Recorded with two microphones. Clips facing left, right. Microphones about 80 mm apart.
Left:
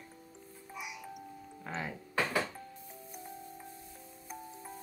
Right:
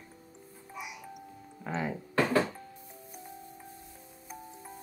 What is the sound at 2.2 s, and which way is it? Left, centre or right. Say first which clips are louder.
Music: right 6 dB; right.